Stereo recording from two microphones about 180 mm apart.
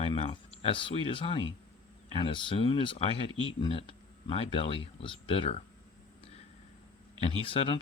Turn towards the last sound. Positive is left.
turn(degrees=30)  # may be behind; listen again after turning